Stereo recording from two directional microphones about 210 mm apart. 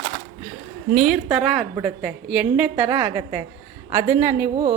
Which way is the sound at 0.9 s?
Centre (ahead or behind).